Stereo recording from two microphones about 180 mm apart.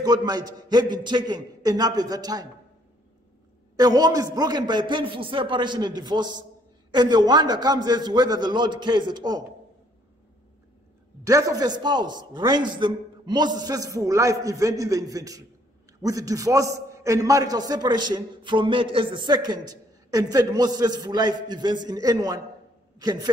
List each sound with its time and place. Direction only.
0.0 s a man's voice: 20° right (ahead or behind)
3.7 s a man's voice: 20° right (ahead or behind)
11.2 s a man's voice: 20° right (ahead or behind)